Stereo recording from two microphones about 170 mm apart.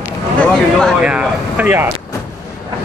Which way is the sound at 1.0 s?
5° right (ahead or behind).